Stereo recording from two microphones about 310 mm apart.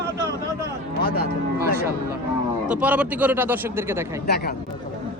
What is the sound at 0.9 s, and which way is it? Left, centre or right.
Speech, left.